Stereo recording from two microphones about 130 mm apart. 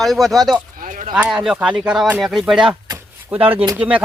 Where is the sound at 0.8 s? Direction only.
85° right.